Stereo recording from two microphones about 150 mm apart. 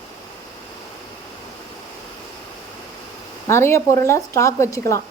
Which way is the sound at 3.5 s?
15° left (ahead or behind).